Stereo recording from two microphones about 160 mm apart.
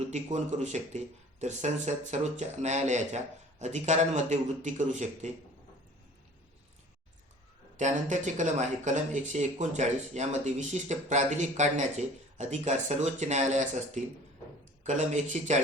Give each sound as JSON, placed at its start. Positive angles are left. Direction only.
{"t": 0.1, "sound": "speech", "side_deg": -45}
{"t": 7.8, "sound": "speech", "side_deg": -50}